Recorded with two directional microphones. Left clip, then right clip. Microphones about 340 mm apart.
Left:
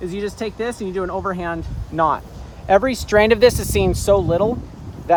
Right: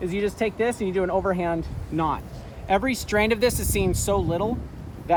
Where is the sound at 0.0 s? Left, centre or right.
Centre.